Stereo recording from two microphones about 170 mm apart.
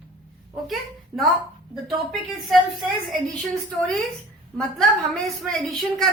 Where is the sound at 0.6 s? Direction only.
Centre (ahead or behind).